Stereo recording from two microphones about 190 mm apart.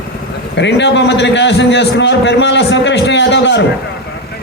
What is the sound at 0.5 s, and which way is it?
A man's voice, 70° left (ahead or behind).